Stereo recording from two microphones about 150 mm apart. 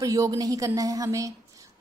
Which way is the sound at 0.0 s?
25° right (ahead or behind).